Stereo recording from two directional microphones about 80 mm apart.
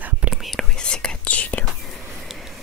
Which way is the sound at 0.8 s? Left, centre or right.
Centre.